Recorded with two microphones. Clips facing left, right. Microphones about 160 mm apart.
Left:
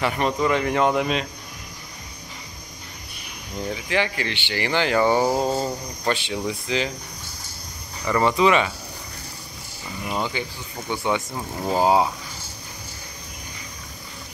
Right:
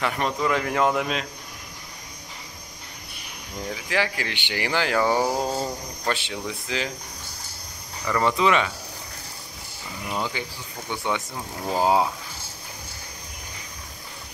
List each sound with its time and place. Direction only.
0.0 s speech: centre (ahead or behind)
3.7 s speech: 5° right (ahead or behind)
8.1 s speech: 5° left (ahead or behind)
10.0 s speech: 15° left (ahead or behind)
10.9 s speech: 5° left (ahead or behind)